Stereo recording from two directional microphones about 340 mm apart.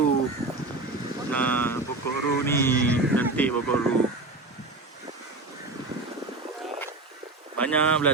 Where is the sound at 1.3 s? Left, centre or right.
Centre.